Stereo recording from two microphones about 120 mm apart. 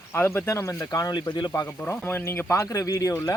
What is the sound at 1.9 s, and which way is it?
Speech, 20° left (ahead or behind).